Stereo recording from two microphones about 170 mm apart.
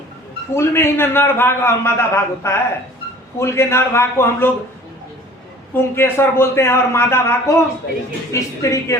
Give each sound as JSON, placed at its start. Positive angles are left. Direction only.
{"t": 0.5, "sound": "a man's voice", "side_deg": 15}
{"t": 5.7, "sound": "a man's voice", "side_deg": 15}